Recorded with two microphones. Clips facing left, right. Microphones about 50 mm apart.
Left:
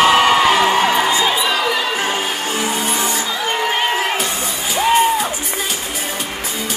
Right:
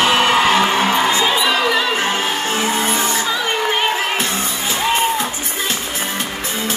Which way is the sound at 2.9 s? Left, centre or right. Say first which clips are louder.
Right 1 dB; right.